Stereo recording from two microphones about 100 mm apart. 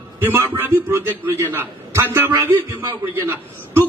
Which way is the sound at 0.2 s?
20° right (ahead or behind).